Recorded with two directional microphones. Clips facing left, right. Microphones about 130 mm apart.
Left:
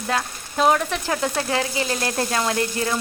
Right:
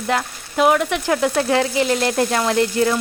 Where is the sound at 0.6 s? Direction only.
10° right (ahead or behind).